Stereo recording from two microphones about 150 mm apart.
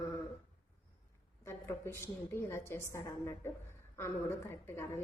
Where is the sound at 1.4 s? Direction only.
15° left (ahead or behind).